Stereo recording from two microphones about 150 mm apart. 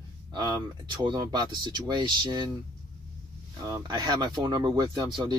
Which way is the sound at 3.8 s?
30° right (ahead or behind).